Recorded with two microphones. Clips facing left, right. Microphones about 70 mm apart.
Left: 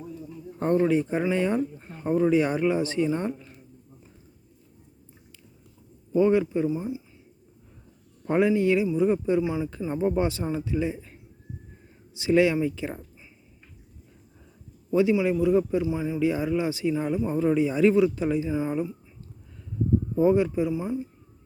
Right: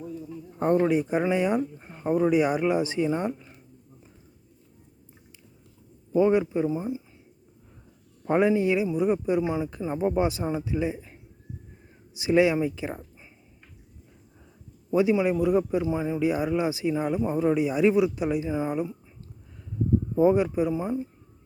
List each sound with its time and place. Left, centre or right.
0.9 s speech: centre
6.1 s speech: centre
8.2 s speech: right
14.8 s speech: right
20.1 s speech: right